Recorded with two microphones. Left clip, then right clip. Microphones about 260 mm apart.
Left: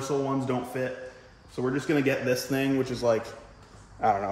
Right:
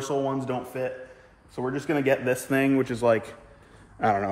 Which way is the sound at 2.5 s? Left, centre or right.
Right.